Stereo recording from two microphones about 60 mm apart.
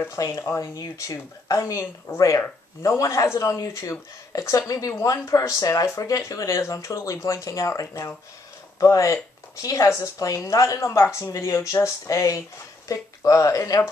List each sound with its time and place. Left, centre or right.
0.1 s speech: left